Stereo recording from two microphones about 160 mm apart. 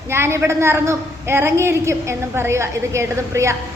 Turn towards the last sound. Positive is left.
turn(degrees=-20)  # may be behind; listen again after turning